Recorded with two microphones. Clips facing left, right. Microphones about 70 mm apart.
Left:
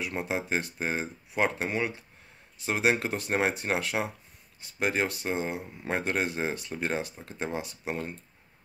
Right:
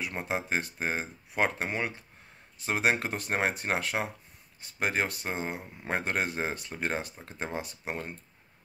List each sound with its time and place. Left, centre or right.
0.0 s speech: right